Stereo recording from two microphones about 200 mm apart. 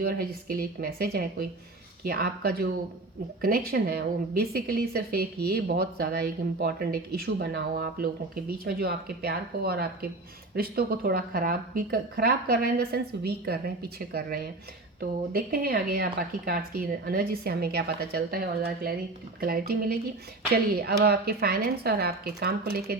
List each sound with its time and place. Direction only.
0.0 s speech: 50° right (ahead or behind)